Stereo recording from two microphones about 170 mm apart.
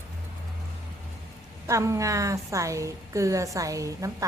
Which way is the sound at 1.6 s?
20° right (ahead or behind).